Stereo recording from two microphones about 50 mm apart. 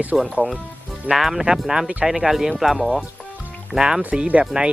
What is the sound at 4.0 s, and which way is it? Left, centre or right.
Speech, right.